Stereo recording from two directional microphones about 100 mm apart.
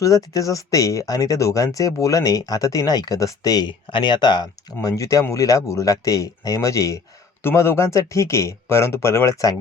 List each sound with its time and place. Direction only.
0.0 s speech: 35° left (ahead or behind)